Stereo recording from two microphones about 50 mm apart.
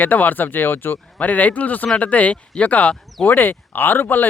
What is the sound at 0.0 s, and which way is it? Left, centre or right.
Speech, left.